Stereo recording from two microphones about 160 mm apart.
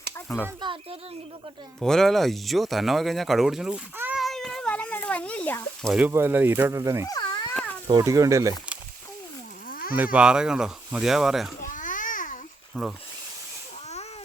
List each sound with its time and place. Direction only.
0.6 s speech: 30° right (ahead or behind)
1.8 s speech: centre (ahead or behind)
4.2 s cat: centre (ahead or behind)
5.9 s speech: 10° right (ahead or behind)
7.1 s a sound: 25° left (ahead or behind)
7.9 s speech: 25° right (ahead or behind)
9.6 s a sound: 65° left (ahead or behind)
9.9 s speech: 10° right (ahead or behind)
11.6 s babbling: 55° left (ahead or behind)
12.7 s speech: 5° left (ahead or behind)